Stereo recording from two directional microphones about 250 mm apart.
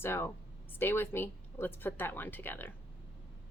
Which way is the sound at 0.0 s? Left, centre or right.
Centre.